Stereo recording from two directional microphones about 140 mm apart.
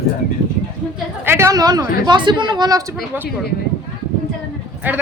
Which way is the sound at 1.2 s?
20° right (ahead or behind).